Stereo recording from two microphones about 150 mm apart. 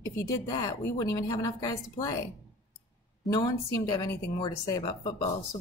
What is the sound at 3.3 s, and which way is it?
Speech, 25° left (ahead or behind).